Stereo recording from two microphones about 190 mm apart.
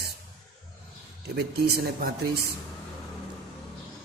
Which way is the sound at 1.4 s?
55° right (ahead or behind).